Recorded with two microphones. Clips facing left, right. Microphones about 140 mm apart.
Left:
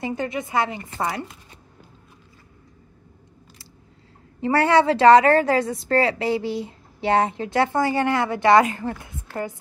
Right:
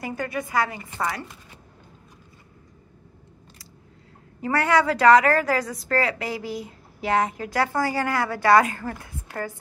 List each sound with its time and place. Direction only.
0.0 s a woman's voice: 25° left (ahead or behind)
4.4 s a woman's voice: 30° left (ahead or behind)